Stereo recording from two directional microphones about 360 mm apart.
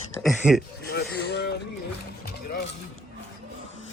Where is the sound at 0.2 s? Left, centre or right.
Centre.